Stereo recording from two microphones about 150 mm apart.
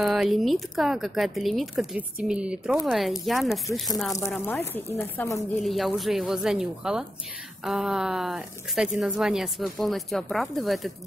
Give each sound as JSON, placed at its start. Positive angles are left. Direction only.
{"t": 0.0, "sound": "speech", "side_deg": 0}
{"t": 4.5, "sound": "speech", "side_deg": 15}
{"t": 5.6, "sound": "speech", "side_deg": 0}